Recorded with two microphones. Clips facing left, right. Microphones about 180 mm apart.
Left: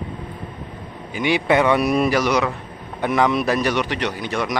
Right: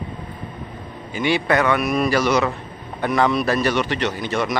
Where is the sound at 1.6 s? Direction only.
30° left (ahead or behind).